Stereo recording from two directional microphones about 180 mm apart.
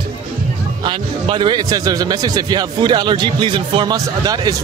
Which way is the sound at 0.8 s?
25° right (ahead or behind).